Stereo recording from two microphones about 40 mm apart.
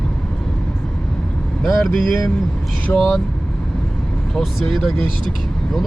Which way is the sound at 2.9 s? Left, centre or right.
Left.